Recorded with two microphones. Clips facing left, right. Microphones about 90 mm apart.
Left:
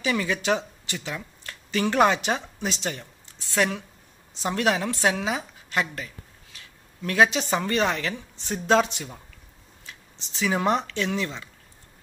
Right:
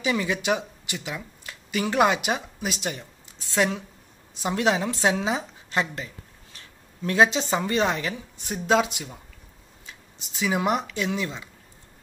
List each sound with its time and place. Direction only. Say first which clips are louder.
0.0 s a woman's voice: even; 15° right (ahead or behind)